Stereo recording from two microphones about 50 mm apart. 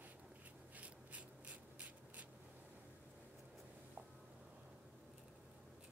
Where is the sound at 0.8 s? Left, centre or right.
Right.